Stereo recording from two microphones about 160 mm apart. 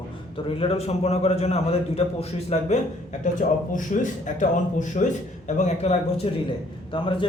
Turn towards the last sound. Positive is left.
turn(degrees=30)  # may be behind; listen again after turning